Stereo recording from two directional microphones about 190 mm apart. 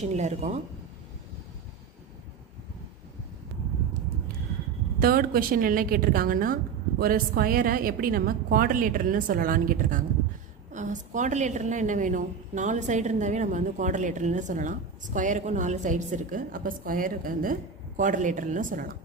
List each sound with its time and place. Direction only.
0.0 s a woman's voice: 35° right (ahead or behind)
4.9 s a woman's voice: 50° right (ahead or behind)